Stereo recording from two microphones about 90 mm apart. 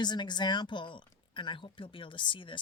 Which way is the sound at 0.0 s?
55° left (ahead or behind).